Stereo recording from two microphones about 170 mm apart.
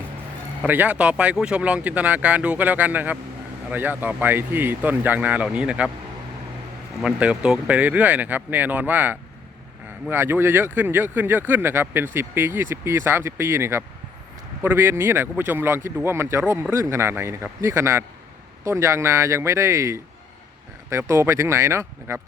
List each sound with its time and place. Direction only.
0.7 s speech: 10° right (ahead or behind)
7.0 s speech: 5° right (ahead or behind)